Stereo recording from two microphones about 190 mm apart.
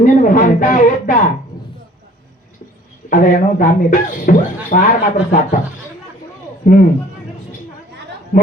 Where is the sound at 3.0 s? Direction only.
45° left (ahead or behind).